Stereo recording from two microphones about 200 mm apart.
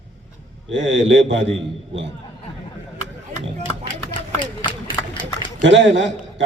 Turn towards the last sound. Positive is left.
turn(degrees=-65)  # may be behind; listen again after turning